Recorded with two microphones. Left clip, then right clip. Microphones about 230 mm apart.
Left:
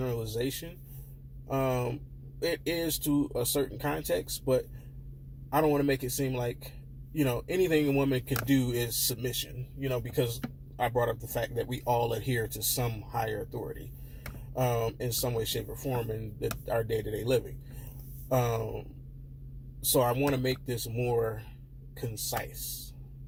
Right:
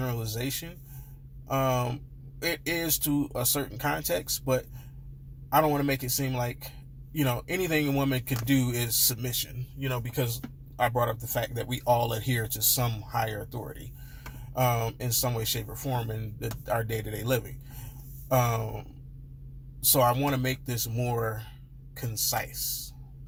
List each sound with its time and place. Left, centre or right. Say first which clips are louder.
0.0 s a sound: left 2 dB; right
1.5 s speech: right 3 dB; right
19.9 s speech: right 2 dB; right